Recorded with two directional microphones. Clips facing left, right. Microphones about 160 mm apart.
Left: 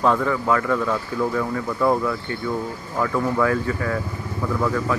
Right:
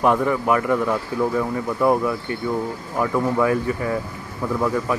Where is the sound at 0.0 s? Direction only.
15° right (ahead or behind).